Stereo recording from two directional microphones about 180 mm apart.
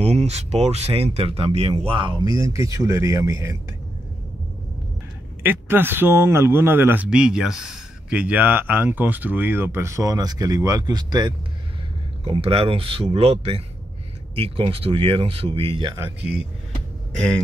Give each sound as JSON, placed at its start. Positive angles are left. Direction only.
{"t": 0.0, "sound": "speech", "side_deg": -35}
{"t": 5.4, "sound": "speech", "side_deg": -10}